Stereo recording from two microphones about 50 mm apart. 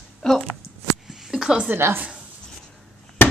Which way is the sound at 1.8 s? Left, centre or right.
Right.